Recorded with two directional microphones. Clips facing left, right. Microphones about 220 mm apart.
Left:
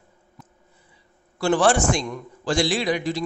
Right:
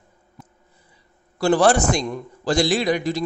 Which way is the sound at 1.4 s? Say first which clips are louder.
Right 2 dB; 40° right (ahead or behind).